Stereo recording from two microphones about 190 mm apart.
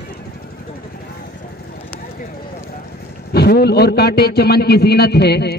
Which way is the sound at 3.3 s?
55° left (ahead or behind).